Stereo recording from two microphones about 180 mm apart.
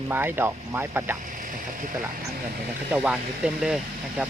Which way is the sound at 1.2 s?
45° right (ahead or behind).